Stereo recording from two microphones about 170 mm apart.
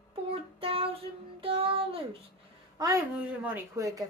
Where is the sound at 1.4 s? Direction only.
30° right (ahead or behind).